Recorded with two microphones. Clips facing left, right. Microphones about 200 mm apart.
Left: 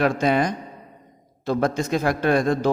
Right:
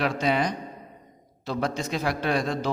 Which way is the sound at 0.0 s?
50° left (ahead or behind).